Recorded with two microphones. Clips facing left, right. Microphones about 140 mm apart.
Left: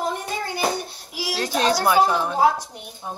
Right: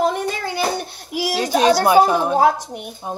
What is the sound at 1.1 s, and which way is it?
Speech, 55° right (ahead or behind).